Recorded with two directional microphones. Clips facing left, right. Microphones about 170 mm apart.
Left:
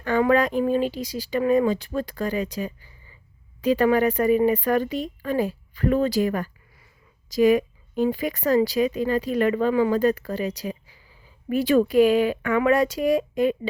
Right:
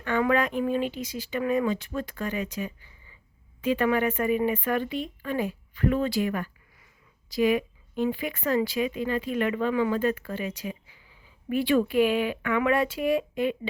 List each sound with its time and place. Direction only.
0.0 s speech: 35° left (ahead or behind)